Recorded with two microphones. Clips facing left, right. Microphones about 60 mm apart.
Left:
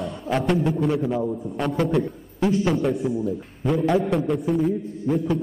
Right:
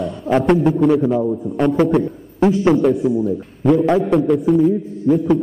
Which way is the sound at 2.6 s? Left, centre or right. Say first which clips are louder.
Right 8 dB; right.